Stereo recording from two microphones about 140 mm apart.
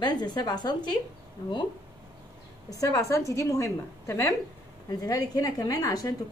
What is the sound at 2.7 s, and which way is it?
A woman's voice, 25° left (ahead or behind).